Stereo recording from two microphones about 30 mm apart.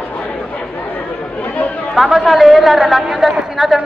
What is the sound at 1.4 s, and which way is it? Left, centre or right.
Chatter, left.